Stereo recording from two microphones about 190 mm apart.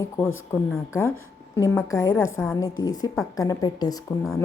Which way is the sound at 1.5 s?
15° left (ahead or behind).